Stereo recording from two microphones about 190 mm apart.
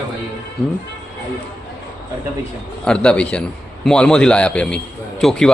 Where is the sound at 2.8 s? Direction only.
5° left (ahead or behind).